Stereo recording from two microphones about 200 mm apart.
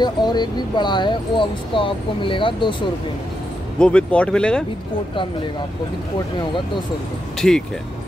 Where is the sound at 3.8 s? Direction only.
5° left (ahead or behind).